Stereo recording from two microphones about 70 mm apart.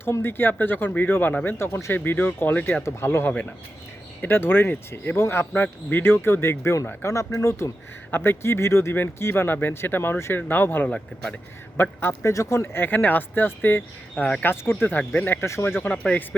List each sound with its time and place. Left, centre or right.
0.0 s speech: left
1.5 s speech: left
2.8 s speech: left
8.1 s speech: left
10.8 s speech: centre
11.8 s speech: left
12.3 s speech: left